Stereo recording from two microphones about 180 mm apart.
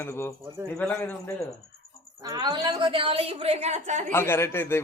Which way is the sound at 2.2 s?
20° right (ahead or behind).